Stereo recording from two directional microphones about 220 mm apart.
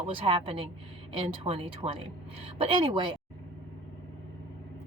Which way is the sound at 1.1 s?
25° right (ahead or behind).